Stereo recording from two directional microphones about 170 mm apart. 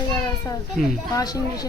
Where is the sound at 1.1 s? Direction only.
20° left (ahead or behind).